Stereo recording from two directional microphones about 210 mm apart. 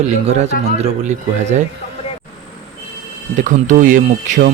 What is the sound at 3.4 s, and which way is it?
Speech, 35° right (ahead or behind).